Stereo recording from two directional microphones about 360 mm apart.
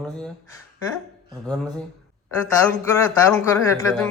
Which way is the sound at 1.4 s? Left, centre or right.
Centre.